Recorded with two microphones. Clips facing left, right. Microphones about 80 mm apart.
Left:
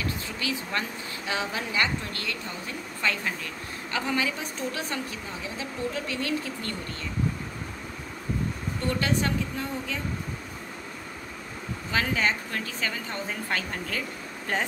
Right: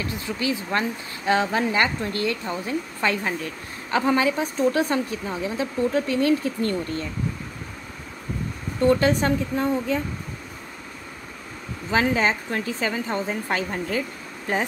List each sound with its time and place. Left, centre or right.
0.0 s a woman's voice: right
8.8 s a woman's voice: right
11.9 s a woman's voice: right